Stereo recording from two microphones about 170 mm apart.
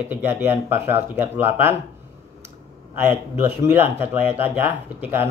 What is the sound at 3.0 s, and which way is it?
Speech, 15° right (ahead or behind).